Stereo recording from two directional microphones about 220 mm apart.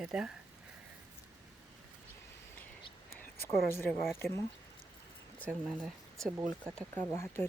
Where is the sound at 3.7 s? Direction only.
10° left (ahead or behind).